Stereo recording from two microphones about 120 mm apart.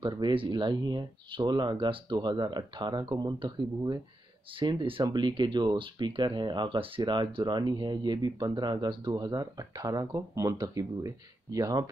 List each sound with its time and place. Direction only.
0.0 s speech: 45° right (ahead or behind); by 11.8 s 30° right (ahead or behind)